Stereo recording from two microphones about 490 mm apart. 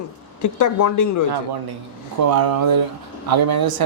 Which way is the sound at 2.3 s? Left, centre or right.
Right.